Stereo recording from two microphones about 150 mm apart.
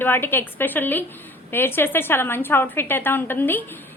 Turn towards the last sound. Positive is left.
turn(degrees=15)  # may be behind; listen again after turning